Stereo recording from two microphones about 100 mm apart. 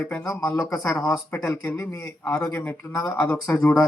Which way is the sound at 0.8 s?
5° left (ahead or behind).